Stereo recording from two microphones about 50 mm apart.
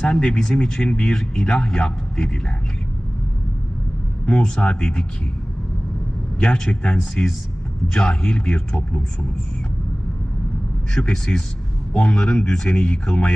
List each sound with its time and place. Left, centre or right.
0.0 s speech: centre
4.3 s speech: centre
6.4 s speech: centre
11.0 s speech: centre